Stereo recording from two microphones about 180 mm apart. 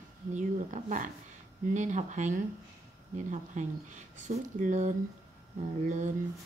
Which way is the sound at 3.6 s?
40° right (ahead or behind).